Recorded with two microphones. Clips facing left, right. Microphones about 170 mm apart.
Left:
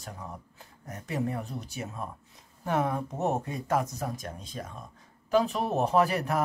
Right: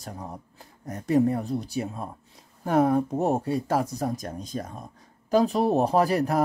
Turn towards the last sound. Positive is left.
turn(degrees=-35)  # may be behind; listen again after turning